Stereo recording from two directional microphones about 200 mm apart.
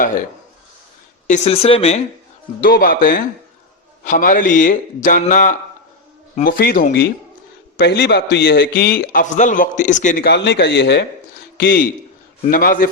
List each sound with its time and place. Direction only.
1.3 s a man's voice: 30° left (ahead or behind)
2.6 s a man's voice: 45° left (ahead or behind)
10.2 s a man's voice: 60° left (ahead or behind)